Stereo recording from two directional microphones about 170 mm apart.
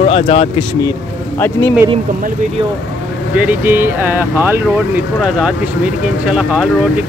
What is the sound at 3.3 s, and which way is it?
Speech, 10° right (ahead or behind).